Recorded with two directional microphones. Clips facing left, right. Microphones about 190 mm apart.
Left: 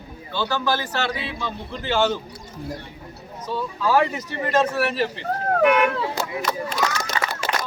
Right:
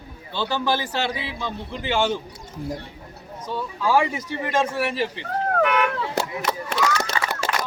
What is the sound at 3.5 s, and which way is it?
A man's voice, 10° right (ahead or behind).